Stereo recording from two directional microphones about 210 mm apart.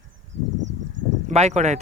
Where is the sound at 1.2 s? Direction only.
30° right (ahead or behind).